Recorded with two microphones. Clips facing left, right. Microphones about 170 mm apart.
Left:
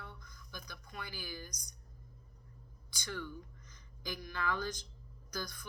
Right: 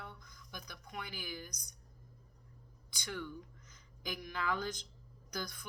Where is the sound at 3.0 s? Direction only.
15° right (ahead or behind).